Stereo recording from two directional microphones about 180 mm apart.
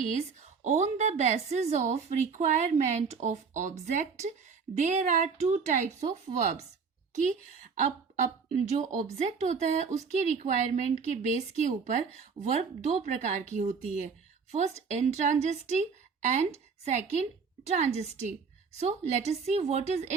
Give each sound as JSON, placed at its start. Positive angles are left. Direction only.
{"t": 0.6, "sound": "a woman's voice", "side_deg": -40}